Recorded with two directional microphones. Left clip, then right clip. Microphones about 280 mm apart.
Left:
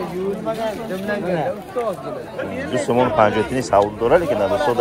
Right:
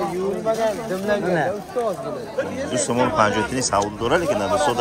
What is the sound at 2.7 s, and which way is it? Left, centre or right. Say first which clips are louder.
Speech: left 3 dB; centre.